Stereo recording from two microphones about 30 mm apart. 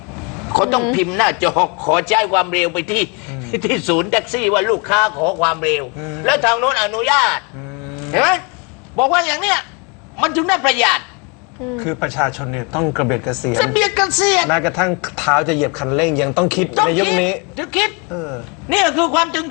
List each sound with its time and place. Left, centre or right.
0.1 s a woman's voice: centre
7.9 s a sound: centre
9.0 s a woman's voice: centre